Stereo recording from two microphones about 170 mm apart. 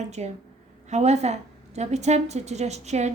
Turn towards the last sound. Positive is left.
turn(degrees=-40)  # may be behind; listen again after turning